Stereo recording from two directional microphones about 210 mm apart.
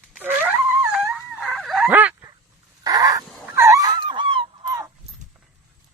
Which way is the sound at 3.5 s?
15° right (ahead or behind).